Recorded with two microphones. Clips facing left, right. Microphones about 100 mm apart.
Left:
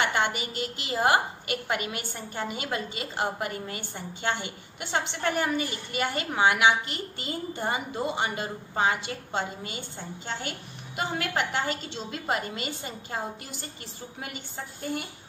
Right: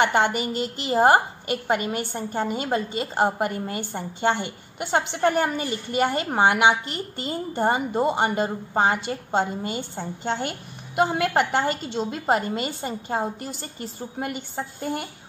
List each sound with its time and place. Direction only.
0.0 s a woman's voice: 45° right (ahead or behind)